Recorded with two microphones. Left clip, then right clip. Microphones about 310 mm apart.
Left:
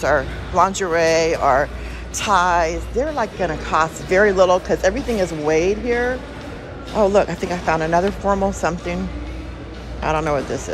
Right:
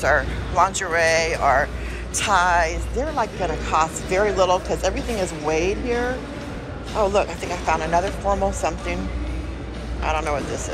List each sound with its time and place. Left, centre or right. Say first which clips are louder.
0.0 s speech: left 1 dB; centre
7.0 s speech: left 4 dB; left
10.0 s speech: left 4 dB; left